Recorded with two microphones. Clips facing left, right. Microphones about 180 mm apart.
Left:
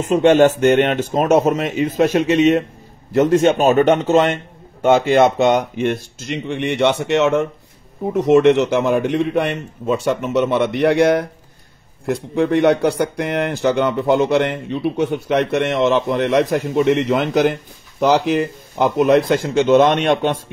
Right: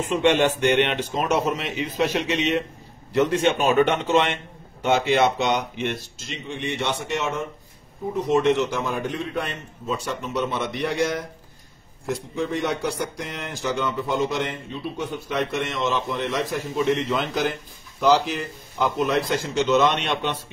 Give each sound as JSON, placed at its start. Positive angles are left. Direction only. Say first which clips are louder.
{"t": 0.1, "sound": "a man's voice", "louder": "left 8 dB", "side_deg": 40}